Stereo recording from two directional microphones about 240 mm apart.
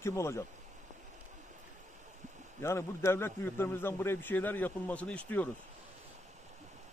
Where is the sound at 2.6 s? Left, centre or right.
Centre.